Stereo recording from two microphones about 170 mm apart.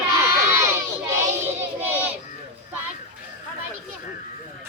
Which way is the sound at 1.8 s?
10° right (ahead or behind).